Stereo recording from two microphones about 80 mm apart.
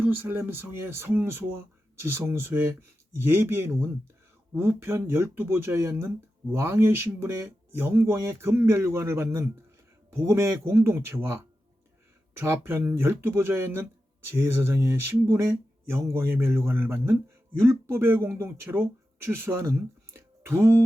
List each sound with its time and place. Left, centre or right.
0.0 s speech: right